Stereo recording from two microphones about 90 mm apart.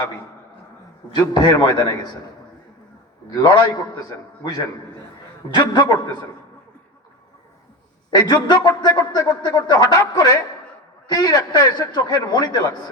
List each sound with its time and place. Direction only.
1.2 s a man's voice: 50° left (ahead or behind)
3.2 s a man's voice: 45° left (ahead or behind)
8.1 s a man's voice: 50° left (ahead or behind)